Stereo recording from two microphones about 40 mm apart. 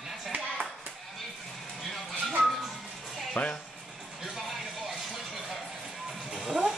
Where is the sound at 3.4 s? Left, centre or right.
Left.